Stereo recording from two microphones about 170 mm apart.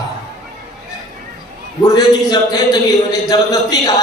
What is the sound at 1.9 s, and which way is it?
A man's voice, 25° left (ahead or behind).